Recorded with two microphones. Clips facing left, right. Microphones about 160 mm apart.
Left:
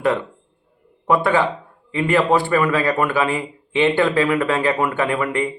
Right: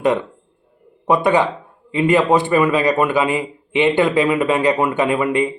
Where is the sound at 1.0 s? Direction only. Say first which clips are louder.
Right 2 dB; 20° right (ahead or behind).